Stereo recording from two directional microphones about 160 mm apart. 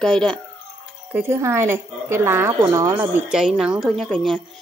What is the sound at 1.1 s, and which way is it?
Speech, 15° right (ahead or behind).